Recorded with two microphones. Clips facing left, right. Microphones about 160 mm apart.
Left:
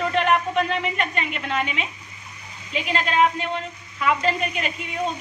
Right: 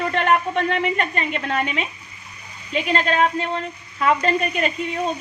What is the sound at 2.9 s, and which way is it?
Speech, 45° right (ahead or behind).